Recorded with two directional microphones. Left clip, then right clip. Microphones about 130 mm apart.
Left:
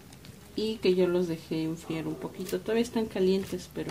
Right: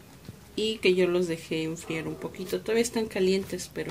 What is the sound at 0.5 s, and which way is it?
Speech, 35° left (ahead or behind).